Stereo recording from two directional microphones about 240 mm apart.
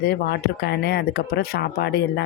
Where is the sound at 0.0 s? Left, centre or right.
Left.